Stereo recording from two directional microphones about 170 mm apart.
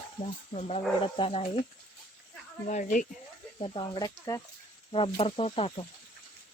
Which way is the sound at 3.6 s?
30° left (ahead or behind).